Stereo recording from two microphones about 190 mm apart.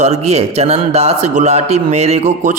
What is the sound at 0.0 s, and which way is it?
A man's voice, 35° right (ahead or behind).